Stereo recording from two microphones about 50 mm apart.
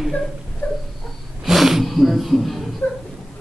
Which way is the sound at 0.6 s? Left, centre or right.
Left.